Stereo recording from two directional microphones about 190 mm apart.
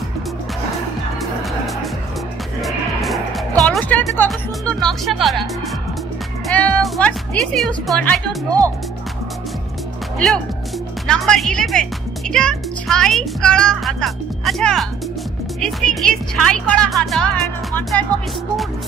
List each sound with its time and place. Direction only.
2.6 s music: centre (ahead or behind)
3.6 s speech: 5° left (ahead or behind)
6.4 s speech: 5° left (ahead or behind)
8.5 s speech: 20° right (ahead or behind)
10.1 s speech: 5° left (ahead or behind)